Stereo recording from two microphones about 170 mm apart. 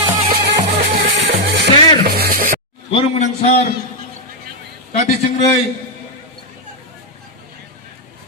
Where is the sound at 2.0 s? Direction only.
65° right (ahead or behind).